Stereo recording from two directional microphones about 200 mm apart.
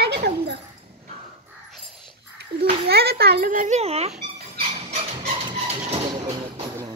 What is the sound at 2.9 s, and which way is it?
A child's voice, 55° right (ahead or behind).